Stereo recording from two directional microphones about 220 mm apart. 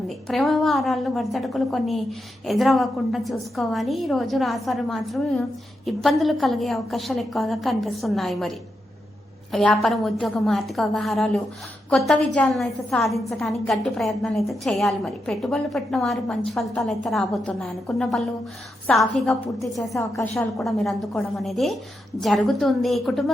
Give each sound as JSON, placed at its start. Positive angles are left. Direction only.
{"t": 0.3, "sound": "a woman's voice", "side_deg": 0}